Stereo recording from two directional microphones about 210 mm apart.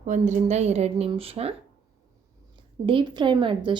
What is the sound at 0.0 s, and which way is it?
Speech, 35° right (ahead or behind).